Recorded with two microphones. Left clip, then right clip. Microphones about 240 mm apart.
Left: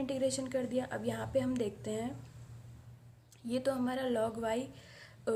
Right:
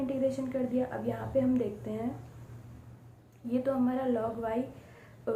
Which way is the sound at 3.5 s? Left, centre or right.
Left.